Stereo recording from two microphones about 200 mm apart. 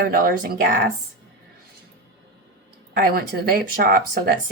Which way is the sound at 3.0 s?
45° right (ahead or behind).